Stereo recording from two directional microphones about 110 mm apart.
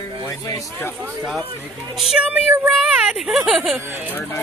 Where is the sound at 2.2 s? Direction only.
15° right (ahead or behind).